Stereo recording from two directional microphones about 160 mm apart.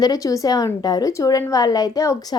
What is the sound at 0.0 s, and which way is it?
Speech, 25° left (ahead or behind).